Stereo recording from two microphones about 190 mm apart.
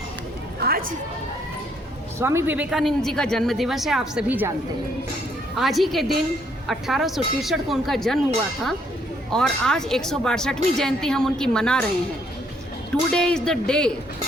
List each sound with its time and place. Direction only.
0.6 s a sound: 50° right (ahead or behind)
2.1 s speech: 15° right (ahead or behind)
5.5 s speech: centre (ahead or behind)
9.3 s speech: 5° left (ahead or behind)
13.1 s speech: 5° left (ahead or behind)